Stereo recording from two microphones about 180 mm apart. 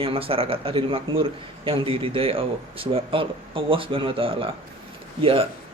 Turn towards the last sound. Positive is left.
turn(degrees=-30)  # may be behind; listen again after turning